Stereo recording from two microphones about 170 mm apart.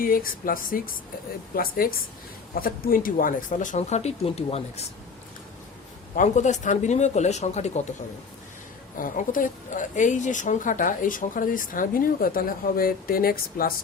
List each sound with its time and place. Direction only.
0.0 s speech: 55° left (ahead or behind); by 4.9 s 35° left (ahead or behind)
6.1 s speech: 45° left (ahead or behind)
9.0 s speech: 55° left (ahead or behind)